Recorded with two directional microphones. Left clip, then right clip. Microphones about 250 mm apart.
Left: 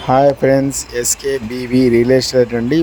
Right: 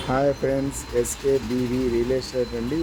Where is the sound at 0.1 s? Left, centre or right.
Left.